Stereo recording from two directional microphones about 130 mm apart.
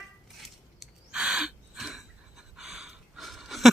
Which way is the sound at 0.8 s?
5° right (ahead or behind).